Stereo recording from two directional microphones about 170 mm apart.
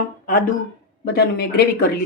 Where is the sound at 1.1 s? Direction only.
70° left (ahead or behind).